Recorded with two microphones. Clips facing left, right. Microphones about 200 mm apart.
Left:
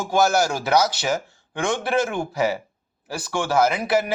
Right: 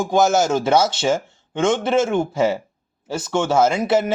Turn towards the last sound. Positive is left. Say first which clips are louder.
# right 3 dB
turn(degrees=-25)  # may be behind; listen again after turning